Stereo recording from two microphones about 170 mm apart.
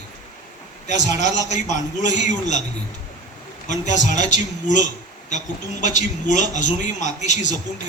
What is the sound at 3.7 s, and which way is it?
Speech, 45° left (ahead or behind).